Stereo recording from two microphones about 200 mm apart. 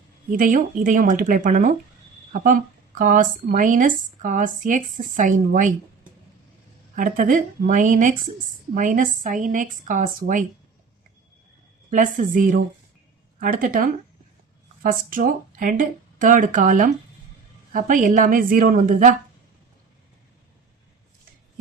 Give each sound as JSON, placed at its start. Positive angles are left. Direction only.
{"t": 0.3, "sound": "speech", "side_deg": -40}
{"t": 6.9, "sound": "speech", "side_deg": -40}
{"t": 11.9, "sound": "speech", "side_deg": -40}
{"t": 14.8, "sound": "speech", "side_deg": -45}